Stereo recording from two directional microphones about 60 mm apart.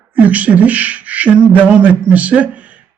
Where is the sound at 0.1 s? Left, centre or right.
Right.